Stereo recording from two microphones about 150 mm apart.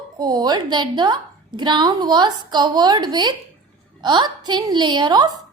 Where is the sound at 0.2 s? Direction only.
30° right (ahead or behind).